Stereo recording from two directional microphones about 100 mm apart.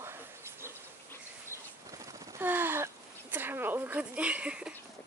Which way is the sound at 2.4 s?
20° right (ahead or behind).